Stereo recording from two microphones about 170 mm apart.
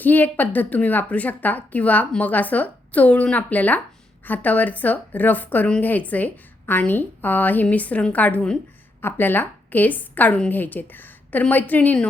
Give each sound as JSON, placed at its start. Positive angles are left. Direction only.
{"t": 0.0, "sound": "a woman's voice", "side_deg": 10}